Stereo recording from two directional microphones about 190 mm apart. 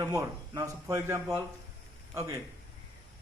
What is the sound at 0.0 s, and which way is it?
A man's voice, 20° right (ahead or behind).